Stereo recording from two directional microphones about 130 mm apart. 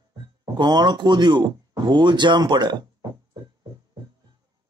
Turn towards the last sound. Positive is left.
turn(degrees=-30)  # may be behind; listen again after turning